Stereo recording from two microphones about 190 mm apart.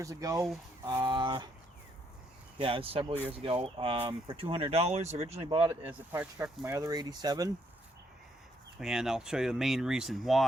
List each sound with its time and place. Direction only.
0.0 s speech: 15° right (ahead or behind)
2.6 s speech: 30° right (ahead or behind)
5.6 s speech: 10° right (ahead or behind)
8.8 s speech: 5° right (ahead or behind)